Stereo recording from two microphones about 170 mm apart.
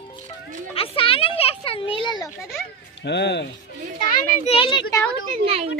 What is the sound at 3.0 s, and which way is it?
Speech, 85° left.